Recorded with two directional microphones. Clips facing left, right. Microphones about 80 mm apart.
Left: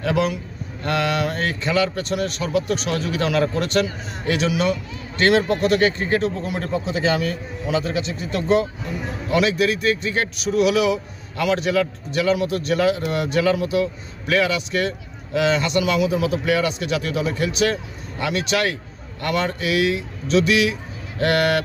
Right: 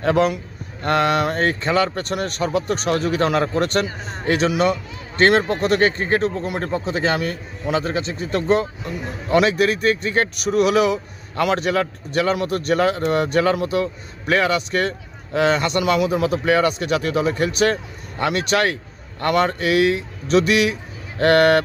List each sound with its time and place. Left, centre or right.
0.0 s speech: right